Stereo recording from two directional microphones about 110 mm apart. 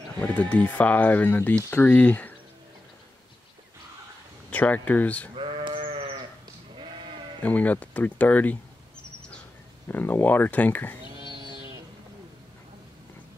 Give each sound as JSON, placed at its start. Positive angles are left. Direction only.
{"t": 0.2, "sound": "speech", "side_deg": 15}
{"t": 4.5, "sound": "speech", "side_deg": 15}
{"t": 5.3, "sound": "sheep", "side_deg": -50}
{"t": 7.4, "sound": "speech", "side_deg": 15}
{"t": 9.8, "sound": "speech", "side_deg": 20}
{"t": 11.2, "sound": "music", "side_deg": -45}